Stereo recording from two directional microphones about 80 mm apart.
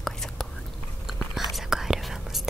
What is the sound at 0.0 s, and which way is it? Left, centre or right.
Whispering, centre.